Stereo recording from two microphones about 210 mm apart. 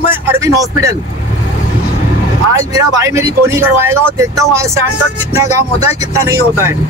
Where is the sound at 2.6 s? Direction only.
15° right (ahead or behind).